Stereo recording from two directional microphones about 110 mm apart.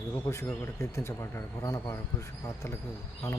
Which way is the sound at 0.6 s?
25° left (ahead or behind).